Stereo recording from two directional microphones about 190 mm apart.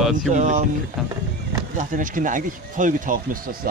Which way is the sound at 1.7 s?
45° right (ahead or behind).